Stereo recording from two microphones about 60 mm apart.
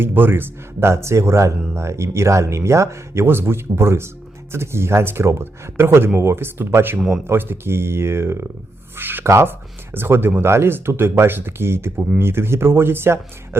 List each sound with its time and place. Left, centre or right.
0.0 s speech: right
3.2 s speech: right
9.2 s speech: right